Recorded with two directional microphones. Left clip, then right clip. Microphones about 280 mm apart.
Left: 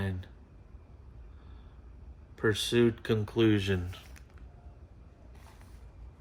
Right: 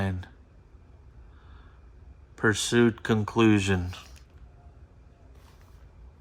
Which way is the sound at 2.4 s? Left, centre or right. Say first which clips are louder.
Right 4 dB; right.